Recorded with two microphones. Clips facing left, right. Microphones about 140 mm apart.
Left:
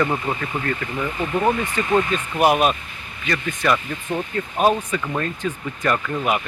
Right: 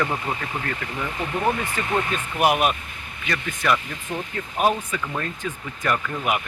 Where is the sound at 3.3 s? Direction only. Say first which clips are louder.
Left 2 dB; 5° right (ahead or behind).